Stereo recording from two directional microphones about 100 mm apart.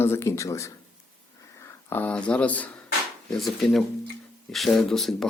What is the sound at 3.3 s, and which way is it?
Speech, centre (ahead or behind).